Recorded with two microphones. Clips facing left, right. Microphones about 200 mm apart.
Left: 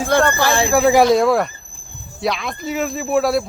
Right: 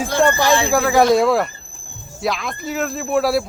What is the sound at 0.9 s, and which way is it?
Speech, centre (ahead or behind).